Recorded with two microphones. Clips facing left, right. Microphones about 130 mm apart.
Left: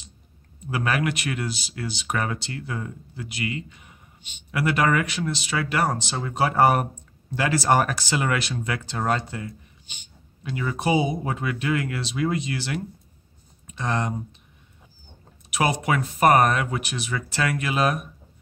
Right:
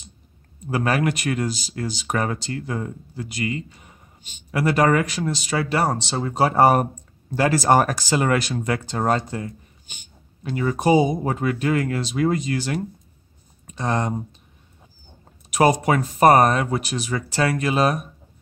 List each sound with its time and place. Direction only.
0.7 s speech: 40° right (ahead or behind)
15.5 s speech: 40° right (ahead or behind)